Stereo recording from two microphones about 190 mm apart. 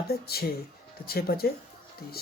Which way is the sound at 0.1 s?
55° left (ahead or behind).